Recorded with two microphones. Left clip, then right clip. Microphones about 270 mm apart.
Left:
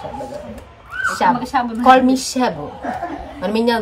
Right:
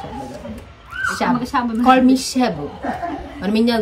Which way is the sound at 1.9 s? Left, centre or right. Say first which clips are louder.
Left 2 dB; centre.